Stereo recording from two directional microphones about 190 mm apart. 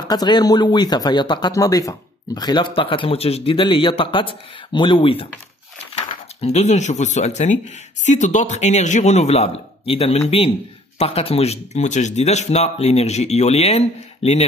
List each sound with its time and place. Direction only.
0.1 s speech: 20° left (ahead or behind)